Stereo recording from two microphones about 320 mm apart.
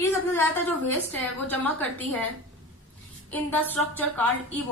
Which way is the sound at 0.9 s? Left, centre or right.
Centre.